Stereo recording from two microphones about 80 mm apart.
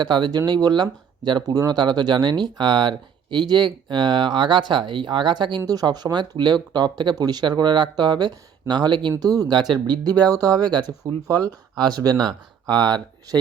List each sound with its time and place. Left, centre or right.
0.0 s speech: right
5.6 s speech: right